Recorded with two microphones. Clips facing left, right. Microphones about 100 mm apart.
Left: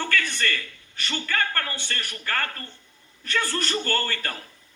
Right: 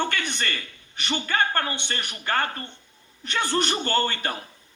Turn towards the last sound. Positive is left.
turn(degrees=-20)  # may be behind; listen again after turning